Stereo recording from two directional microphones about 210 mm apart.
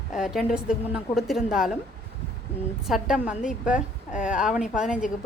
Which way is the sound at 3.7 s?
35° left (ahead or behind).